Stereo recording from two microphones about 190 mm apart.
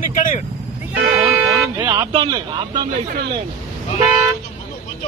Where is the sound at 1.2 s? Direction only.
10° right (ahead or behind).